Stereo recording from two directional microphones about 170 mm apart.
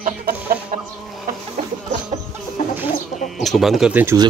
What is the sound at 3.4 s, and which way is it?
Speech, centre (ahead or behind).